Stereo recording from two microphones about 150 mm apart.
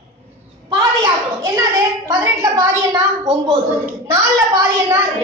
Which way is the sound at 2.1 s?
20° right (ahead or behind).